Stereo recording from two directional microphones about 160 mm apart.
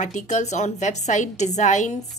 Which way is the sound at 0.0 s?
50° left (ahead or behind).